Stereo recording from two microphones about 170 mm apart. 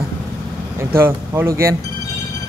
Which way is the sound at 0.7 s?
15° right (ahead or behind).